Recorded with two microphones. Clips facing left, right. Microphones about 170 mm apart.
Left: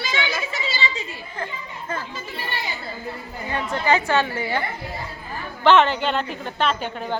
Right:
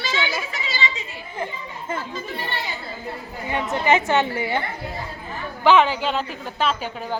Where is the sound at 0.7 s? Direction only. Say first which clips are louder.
Right 3 dB; 35° left (ahead or behind).